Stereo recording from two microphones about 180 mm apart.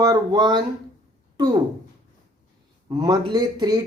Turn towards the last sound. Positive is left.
turn(degrees=-20)  # may be behind; listen again after turning